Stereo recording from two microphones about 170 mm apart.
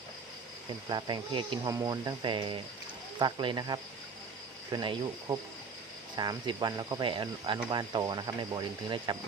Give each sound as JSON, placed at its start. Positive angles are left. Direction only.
{"t": 0.9, "sound": "speech", "side_deg": -25}